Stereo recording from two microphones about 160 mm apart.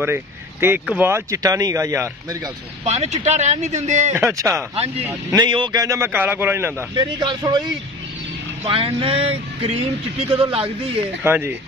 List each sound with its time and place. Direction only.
0.0 s speech: 15° right (ahead or behind)
2.8 s speech: 40° right (ahead or behind)
4.1 s a man's voice: 15° right (ahead or behind)
4.7 s vehicle: 40° right (ahead or behind)
5.0 s a man's voice: 25° right (ahead or behind)
7.0 s speech: 25° right (ahead or behind)
8.6 s vehicle: 35° right (ahead or behind)
11.2 s a man's voice: 15° right (ahead or behind)